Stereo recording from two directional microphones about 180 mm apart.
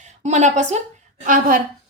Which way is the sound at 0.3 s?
40° right (ahead or behind).